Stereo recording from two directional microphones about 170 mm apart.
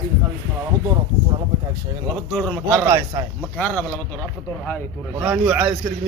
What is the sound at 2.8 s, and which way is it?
Speech, 20° right (ahead or behind).